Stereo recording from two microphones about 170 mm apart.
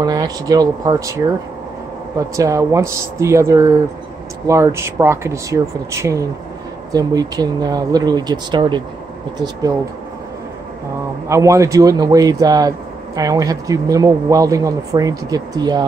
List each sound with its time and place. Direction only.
0.0 s speech: 20° right (ahead or behind)
11.2 s speech: 15° right (ahead or behind)